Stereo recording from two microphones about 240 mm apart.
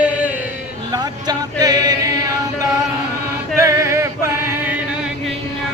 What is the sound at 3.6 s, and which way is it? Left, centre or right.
Male singing, centre.